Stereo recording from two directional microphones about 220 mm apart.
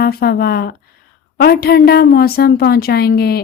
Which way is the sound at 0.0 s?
45° left (ahead or behind).